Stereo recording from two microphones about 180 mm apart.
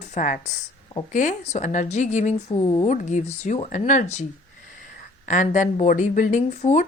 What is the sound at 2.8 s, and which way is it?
Speech, 45° left (ahead or behind).